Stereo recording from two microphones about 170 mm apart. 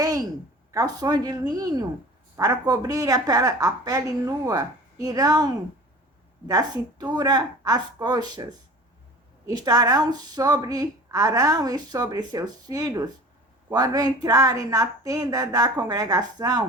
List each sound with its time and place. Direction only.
0.0 s a sound: 20° right (ahead or behind)
0.7 s a woman's voice: 20° right (ahead or behind)
6.5 s a woman's voice: 25° right (ahead or behind)
9.5 s a woman's voice: 25° right (ahead or behind)